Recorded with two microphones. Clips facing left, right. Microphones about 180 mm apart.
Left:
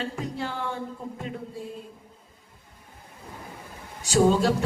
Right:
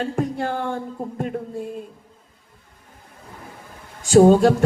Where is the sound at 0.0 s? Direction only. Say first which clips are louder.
Right 7 dB; 50° right (ahead or behind).